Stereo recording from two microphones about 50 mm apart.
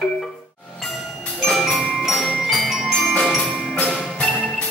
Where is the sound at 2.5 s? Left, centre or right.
Centre.